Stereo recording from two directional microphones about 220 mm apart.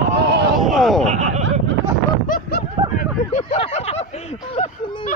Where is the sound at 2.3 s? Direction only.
40° left (ahead or behind).